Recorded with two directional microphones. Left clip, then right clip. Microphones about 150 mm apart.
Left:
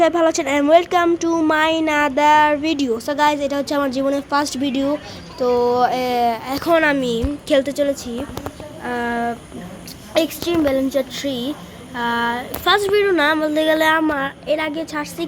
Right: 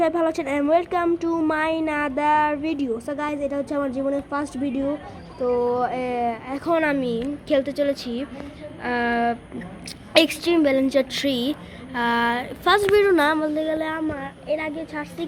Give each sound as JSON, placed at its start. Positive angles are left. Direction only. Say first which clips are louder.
{"t": 0.0, "sound": "speech", "louder": "left 6 dB", "side_deg": 0}
{"t": 8.8, "sound": "speech", "louder": "even", "side_deg": -20}
{"t": 13.5, "sound": "a woman's voice", "louder": "left 9 dB", "side_deg": 5}
{"t": 14.1, "sound": "a woman's voice", "louder": "left 7 dB", "side_deg": 20}